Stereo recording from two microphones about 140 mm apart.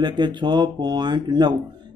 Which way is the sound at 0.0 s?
35° right (ahead or behind).